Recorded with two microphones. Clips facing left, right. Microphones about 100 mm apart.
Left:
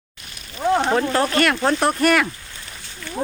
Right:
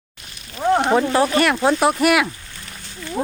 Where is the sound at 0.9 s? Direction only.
10° right (ahead or behind).